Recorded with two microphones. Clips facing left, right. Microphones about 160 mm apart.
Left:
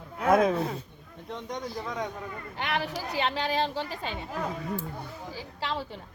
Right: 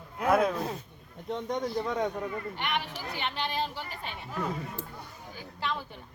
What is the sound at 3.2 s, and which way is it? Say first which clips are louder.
Speech: left 5 dB; 90° left.